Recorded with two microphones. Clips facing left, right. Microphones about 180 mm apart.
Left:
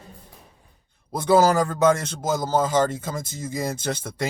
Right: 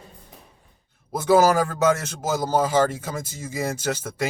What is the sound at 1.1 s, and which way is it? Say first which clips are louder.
A man's voice: even; 10° right (ahead or behind).